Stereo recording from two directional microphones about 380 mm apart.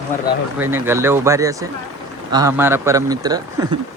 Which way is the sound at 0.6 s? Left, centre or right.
Centre.